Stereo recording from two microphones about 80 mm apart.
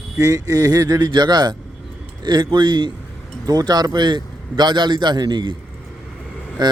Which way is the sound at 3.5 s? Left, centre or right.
Right.